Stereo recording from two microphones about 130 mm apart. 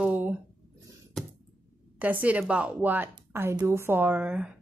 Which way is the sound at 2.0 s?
10° right (ahead or behind).